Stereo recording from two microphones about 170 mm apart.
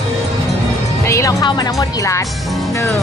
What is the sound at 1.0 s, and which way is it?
Speech, 20° left (ahead or behind).